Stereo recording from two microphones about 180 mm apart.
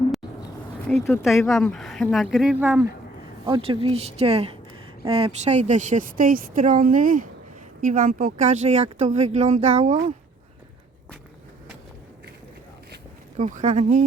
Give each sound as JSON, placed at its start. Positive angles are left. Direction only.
{"t": 0.9, "sound": "speech", "side_deg": 15}
{"t": 1.3, "sound": "speech", "side_deg": 0}
{"t": 3.4, "sound": "speech", "side_deg": -30}
{"t": 13.3, "sound": "speech", "side_deg": -40}